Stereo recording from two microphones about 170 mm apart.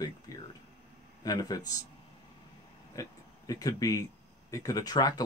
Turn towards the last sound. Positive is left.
turn(degrees=25)  # may be behind; listen again after turning